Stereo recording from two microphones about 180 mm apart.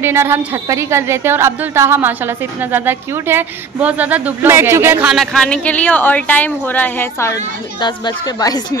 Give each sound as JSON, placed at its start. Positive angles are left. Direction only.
{"t": 0.0, "sound": "a woman's voice", "side_deg": -15}
{"t": 5.1, "sound": "speech", "side_deg": 0}